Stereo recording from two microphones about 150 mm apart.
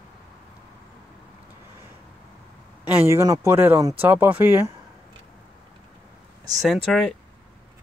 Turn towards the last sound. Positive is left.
turn(degrees=0)  # may be behind; listen again after turning